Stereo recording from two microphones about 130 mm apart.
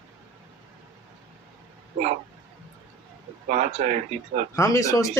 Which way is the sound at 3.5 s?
60° right (ahead or behind).